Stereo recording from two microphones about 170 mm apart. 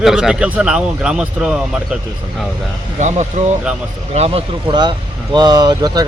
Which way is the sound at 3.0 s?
45° right (ahead or behind).